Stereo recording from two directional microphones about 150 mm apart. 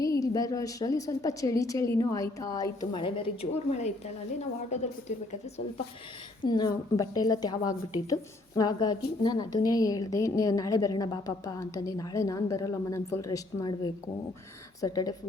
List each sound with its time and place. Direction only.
0.0 s a woman's voice: 25° left (ahead or behind); by 4.9 s 50° left (ahead or behind)
6.4 s a woman's voice: 30° left (ahead or behind)